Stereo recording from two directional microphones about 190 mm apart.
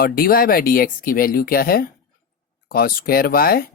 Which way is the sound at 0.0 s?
50° left (ahead or behind).